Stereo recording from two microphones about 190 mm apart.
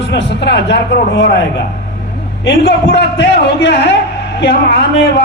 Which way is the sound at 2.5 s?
65° left (ahead or behind).